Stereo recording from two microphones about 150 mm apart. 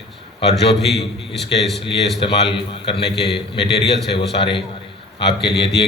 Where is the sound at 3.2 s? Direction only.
90° left.